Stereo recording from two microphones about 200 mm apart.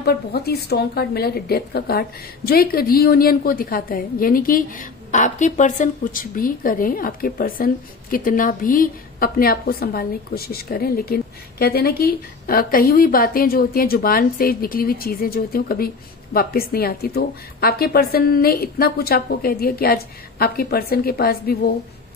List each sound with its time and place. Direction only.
0.0 s a woman's voice: 50° left (ahead or behind)